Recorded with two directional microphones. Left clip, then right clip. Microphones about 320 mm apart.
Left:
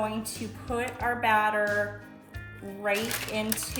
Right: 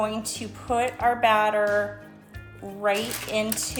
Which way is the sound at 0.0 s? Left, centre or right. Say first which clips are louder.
Right 4 dB; centre.